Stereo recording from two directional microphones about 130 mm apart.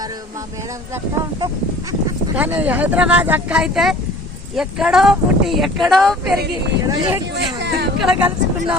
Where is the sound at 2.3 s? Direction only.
10° right (ahead or behind).